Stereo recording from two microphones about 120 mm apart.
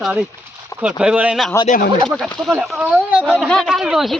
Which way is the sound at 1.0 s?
10° right (ahead or behind).